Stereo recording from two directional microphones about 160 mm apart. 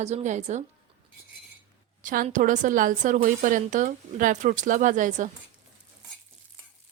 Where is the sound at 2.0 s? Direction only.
55° right (ahead or behind).